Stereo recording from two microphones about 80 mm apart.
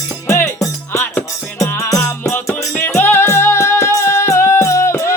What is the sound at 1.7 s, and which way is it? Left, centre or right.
Music, left.